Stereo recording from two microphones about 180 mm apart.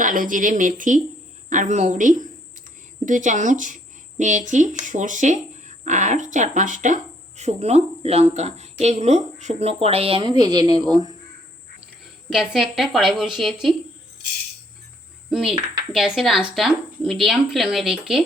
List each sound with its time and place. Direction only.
0.0 s speech: 45° right (ahead or behind); by 11.1 s 25° right (ahead or behind)
12.3 s speech: centre (ahead or behind)
15.3 s speech: centre (ahead or behind)